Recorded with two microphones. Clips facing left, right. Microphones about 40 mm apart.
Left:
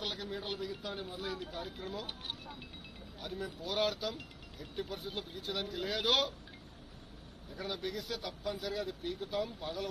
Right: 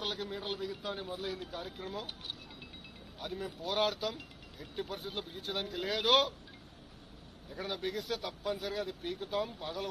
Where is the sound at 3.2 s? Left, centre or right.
Right.